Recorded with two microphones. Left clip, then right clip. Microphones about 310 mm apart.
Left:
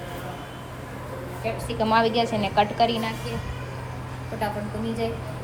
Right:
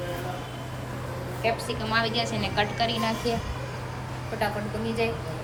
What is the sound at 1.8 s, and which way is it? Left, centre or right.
A woman's voice, centre.